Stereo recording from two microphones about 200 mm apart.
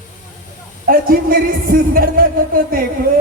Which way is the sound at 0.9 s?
45° right (ahead or behind).